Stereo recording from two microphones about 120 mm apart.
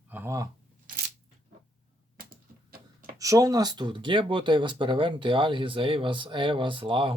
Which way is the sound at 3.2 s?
30° right (ahead or behind).